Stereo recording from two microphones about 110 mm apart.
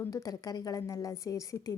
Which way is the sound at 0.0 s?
30° left (ahead or behind).